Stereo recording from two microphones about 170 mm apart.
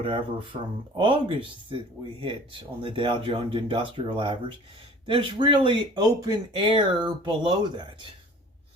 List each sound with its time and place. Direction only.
0.0 s speech: 30° right (ahead or behind)